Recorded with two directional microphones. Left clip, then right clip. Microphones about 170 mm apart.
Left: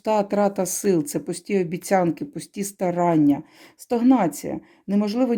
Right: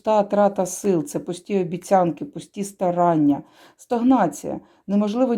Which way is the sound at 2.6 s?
15° left (ahead or behind).